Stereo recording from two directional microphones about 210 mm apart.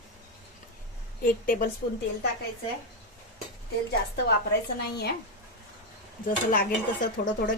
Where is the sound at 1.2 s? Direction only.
40° left (ahead or behind).